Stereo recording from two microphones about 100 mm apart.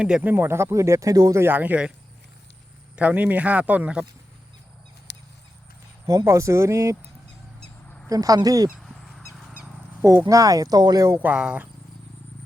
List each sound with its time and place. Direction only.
0.0 s speech: 10° right (ahead or behind); by 1.4 s 35° right (ahead or behind)
1.4 s speech: 20° right (ahead or behind)
2.9 s speech: 15° right (ahead or behind)
6.1 s speech: 30° right (ahead or behind)
7.9 s bird: 20° left (ahead or behind)
8.1 s speech: 35° right (ahead or behind)
10.2 s speech: 35° right (ahead or behind)
11.2 s speech: 10° right (ahead or behind)